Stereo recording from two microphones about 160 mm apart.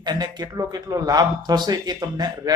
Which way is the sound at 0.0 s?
25° right (ahead or behind).